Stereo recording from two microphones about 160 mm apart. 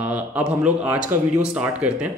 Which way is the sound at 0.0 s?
10° right (ahead or behind).